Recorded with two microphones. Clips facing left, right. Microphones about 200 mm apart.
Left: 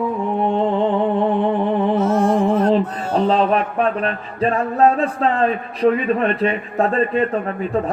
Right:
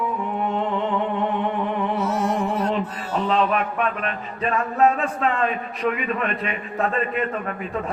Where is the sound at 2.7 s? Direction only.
40° left (ahead or behind).